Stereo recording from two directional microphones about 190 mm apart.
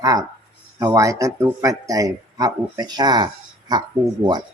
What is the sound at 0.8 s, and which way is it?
Speech, 15° right (ahead or behind).